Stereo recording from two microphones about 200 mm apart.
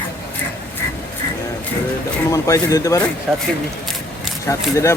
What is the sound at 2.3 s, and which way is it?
Speech, 15° left (ahead or behind).